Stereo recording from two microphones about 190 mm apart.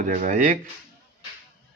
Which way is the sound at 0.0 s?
40° right (ahead or behind).